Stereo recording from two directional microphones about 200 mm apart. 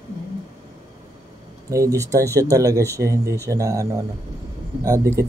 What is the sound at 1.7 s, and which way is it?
Speech, 15° right (ahead or behind).